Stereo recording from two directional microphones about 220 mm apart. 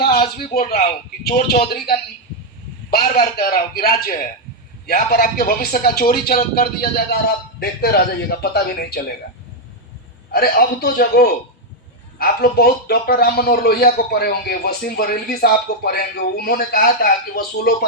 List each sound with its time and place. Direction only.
0.3 s speech: 40° left (ahead or behind)
10.3 s speech: 40° left (ahead or behind)